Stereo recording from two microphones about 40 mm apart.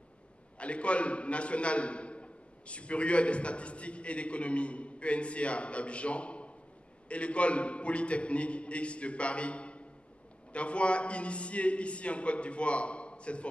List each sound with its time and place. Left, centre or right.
0.6 s a man's voice: left